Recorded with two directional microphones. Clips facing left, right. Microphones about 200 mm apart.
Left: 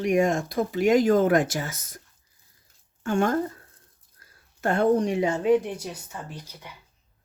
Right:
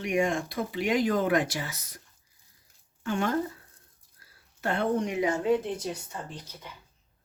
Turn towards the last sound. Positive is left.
turn(degrees=10)  # may be behind; listen again after turning